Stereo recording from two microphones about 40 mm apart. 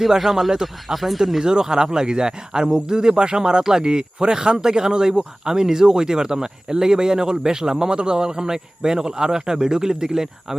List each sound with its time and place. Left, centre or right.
0.0 s speech: centre
1.5 s speech: centre